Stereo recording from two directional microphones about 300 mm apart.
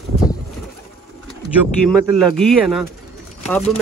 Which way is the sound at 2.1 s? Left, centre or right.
Centre.